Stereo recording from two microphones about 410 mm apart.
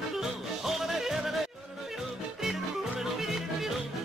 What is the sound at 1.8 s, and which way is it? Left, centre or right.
Music, centre.